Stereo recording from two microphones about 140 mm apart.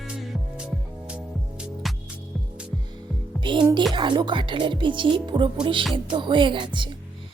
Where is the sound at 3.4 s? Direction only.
35° right (ahead or behind).